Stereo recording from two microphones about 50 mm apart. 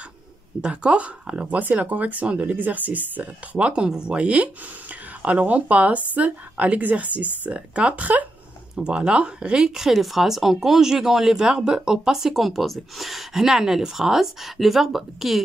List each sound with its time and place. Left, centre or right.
0.6 s a woman's voice: right
8.7 s a woman's voice: centre
9.8 s speech: centre